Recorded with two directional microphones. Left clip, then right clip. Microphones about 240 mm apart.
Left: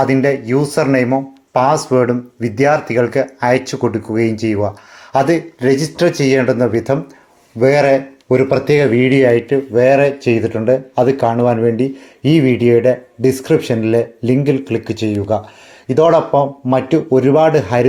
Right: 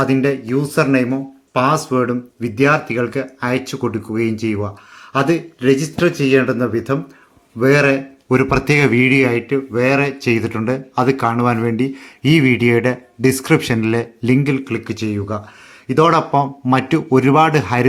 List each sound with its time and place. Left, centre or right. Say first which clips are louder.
0.1 s speech: left 3 dB; centre
7.9 s speech: left 4 dB; centre
9.1 s speech: left 4 dB; centre